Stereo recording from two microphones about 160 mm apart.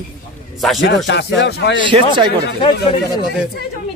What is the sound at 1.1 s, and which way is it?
Speech, 90° left.